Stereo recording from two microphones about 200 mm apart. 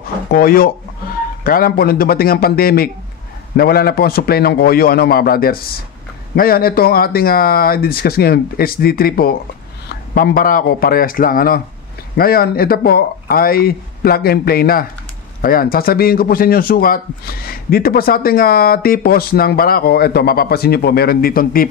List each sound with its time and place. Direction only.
0.3 s a man's voice: 45° left (ahead or behind)